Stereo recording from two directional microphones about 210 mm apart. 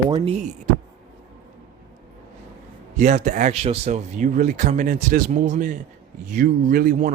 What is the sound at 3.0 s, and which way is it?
Speech, 35° right (ahead or behind).